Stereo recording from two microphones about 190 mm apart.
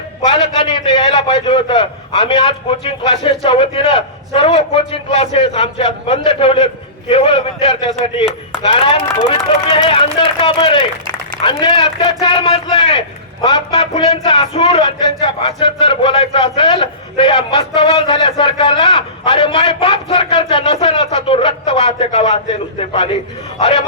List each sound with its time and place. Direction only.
0.3 s a man's voice: 30° left (ahead or behind)
23.6 s speech: 30° left (ahead or behind)